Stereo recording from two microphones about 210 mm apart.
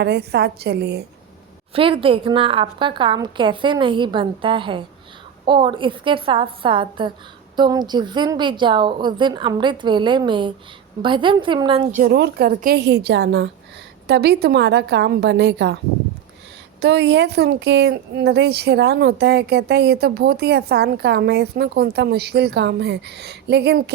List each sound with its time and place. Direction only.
0.0 s speech: 50° right (ahead or behind)
1.7 s a woman's voice: 25° right (ahead or behind)
11.9 s a woman's voice: 35° right (ahead or behind)
12.1 s speech: 50° right (ahead or behind)
16.8 s speech: 55° right (ahead or behind)